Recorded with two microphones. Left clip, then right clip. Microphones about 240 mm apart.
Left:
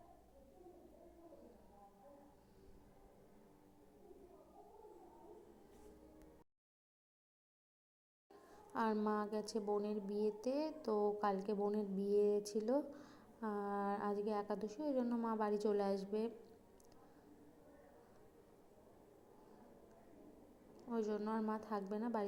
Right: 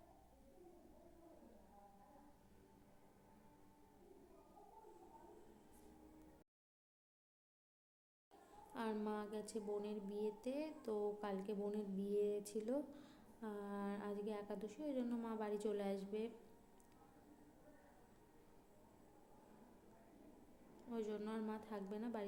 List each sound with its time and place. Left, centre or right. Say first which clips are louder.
8.7 s a woman's voice: left 7 dB; centre
12.9 s a sound: left 4 dB; centre
13.4 s a woman's voice: left 7 dB; centre
20.9 s a woman's voice: left 6 dB; centre